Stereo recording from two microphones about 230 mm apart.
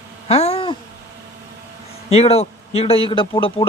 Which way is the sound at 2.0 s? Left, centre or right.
Left.